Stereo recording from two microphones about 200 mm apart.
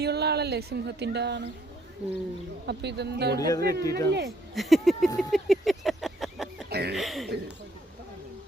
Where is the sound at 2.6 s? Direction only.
55° right (ahead or behind).